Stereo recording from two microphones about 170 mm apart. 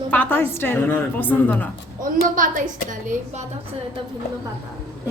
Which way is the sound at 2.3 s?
50° right (ahead or behind).